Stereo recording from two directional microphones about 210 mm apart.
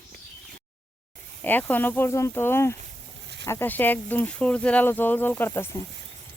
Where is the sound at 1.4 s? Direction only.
10° left (ahead or behind).